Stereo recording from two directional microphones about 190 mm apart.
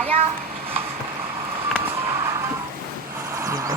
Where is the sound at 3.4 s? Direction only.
20° right (ahead or behind).